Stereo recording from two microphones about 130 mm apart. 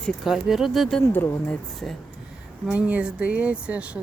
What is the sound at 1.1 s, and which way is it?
Speech, 15° left (ahead or behind).